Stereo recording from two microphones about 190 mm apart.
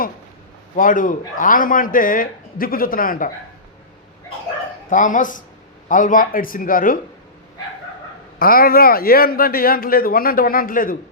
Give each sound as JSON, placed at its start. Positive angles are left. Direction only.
{"t": 0.8, "sound": "a man's voice", "side_deg": 45}
{"t": 4.9, "sound": "a man's voice", "side_deg": 40}
{"t": 8.4, "sound": "a man's voice", "side_deg": 50}